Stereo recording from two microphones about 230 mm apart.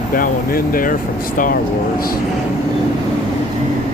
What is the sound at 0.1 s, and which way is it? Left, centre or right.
Speech, left.